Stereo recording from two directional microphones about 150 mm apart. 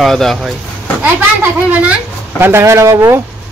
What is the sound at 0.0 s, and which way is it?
Speech, centre (ahead or behind).